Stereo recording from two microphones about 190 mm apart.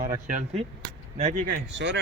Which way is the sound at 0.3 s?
40° right (ahead or behind).